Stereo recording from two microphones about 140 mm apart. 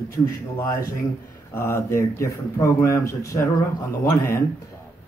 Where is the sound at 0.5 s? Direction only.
20° left (ahead or behind).